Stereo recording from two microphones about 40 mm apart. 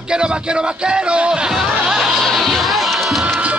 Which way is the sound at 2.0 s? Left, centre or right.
Centre.